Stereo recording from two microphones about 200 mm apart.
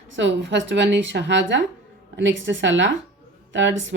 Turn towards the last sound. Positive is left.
turn(degrees=-70)  # may be behind; listen again after turning